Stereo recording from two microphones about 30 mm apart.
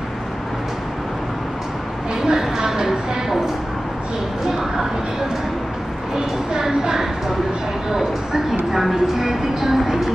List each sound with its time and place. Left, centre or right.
2.2 s a woman's voice: centre
6.5 s a woman's voice: right